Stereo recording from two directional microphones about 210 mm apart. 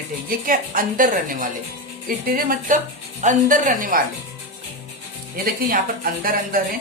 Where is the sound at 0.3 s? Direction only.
40° right (ahead or behind).